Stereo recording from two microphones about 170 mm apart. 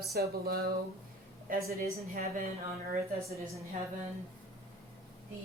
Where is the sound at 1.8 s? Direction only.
50° right (ahead or behind).